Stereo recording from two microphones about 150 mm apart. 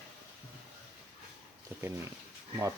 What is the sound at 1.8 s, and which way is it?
Speech, 20° right (ahead or behind).